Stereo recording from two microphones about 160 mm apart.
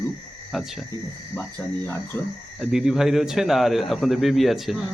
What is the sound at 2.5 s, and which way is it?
A man's voice, centre (ahead or behind).